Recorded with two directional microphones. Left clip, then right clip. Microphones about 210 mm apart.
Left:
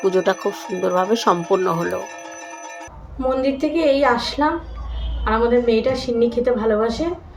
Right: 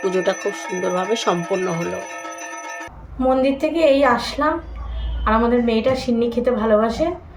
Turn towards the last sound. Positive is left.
turn(degrees=10)  # may be behind; listen again after turning